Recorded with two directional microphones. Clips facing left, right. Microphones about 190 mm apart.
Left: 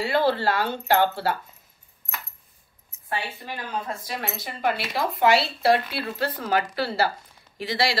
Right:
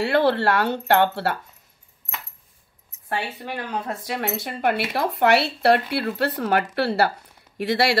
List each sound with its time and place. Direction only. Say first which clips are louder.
0.0 s speech: right 3 dB; 70° right (ahead or behind)
3.1 s a woman's voice: right 3 dB; 65° right (ahead or behind)